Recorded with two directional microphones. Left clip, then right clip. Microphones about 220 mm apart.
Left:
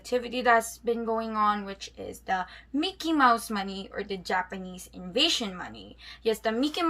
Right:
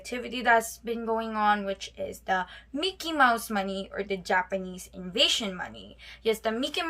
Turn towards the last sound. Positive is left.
turn(degrees=-25)  # may be behind; listen again after turning